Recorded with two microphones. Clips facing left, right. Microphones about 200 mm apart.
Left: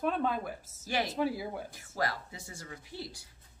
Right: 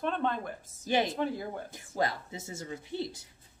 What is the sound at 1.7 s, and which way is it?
A woman's voice, 25° right (ahead or behind).